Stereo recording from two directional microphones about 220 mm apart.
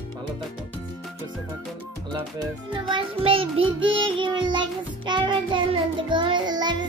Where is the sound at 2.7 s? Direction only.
25° right (ahead or behind).